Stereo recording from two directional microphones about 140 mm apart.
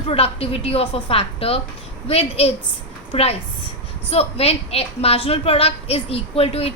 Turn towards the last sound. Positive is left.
turn(degrees=45)  # may be behind; listen again after turning